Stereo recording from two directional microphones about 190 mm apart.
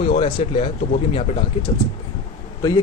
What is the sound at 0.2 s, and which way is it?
Speech, 30° left (ahead or behind).